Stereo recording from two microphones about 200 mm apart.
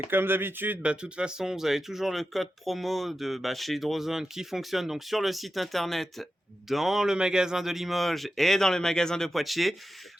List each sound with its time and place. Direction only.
0.1 s speech: 10° right (ahead or behind)